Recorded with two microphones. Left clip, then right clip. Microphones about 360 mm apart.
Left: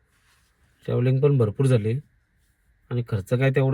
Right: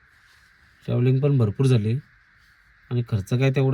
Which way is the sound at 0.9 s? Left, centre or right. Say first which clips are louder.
Left 2 dB; centre.